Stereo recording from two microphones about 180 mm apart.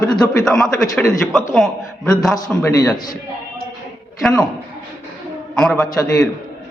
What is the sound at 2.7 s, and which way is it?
Speech, 20° left (ahead or behind).